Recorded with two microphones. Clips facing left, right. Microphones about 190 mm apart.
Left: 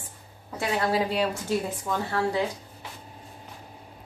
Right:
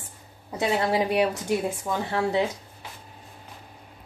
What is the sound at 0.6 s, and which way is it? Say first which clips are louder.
A woman's voice: right 2 dB; 20° right (ahead or behind).